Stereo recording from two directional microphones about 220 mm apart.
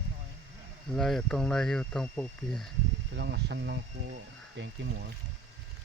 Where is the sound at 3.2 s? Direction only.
50° right (ahead or behind).